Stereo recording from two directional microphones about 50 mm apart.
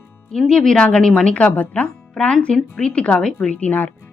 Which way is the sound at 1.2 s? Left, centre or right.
Left.